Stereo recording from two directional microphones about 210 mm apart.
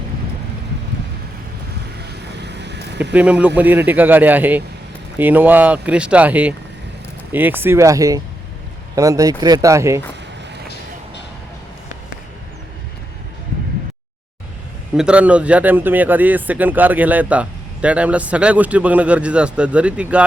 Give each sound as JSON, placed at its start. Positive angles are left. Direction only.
{"t": 2.3, "sound": "vehicle", "side_deg": -55}
{"t": 3.1, "sound": "speech", "side_deg": -5}
{"t": 14.9, "sound": "speech", "side_deg": -5}